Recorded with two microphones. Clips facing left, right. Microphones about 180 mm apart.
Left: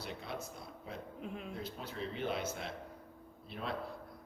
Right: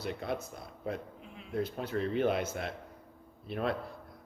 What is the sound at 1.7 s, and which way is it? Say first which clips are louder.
Speech: right 10 dB; 60° right (ahead or behind).